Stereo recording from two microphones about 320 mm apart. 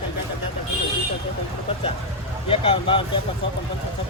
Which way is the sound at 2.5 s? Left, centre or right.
Centre.